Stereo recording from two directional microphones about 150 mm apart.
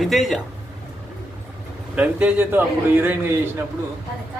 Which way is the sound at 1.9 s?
10° right (ahead or behind).